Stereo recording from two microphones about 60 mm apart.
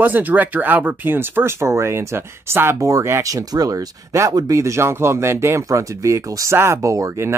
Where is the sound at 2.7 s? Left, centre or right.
Right.